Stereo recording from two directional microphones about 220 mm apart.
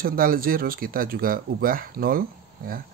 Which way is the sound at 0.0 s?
40° right (ahead or behind).